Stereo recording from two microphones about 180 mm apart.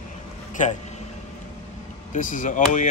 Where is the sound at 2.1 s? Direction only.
45° left (ahead or behind).